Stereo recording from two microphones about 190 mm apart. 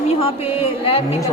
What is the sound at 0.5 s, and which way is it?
Speech, 35° left (ahead or behind).